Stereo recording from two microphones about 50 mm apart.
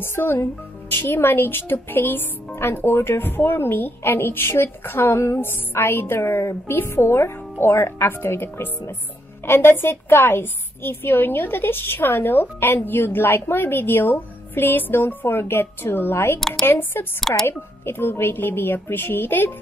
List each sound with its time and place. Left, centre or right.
0.0 s speech: left
9.5 s speech: left
16.3 s speech: centre
16.6 s speech: left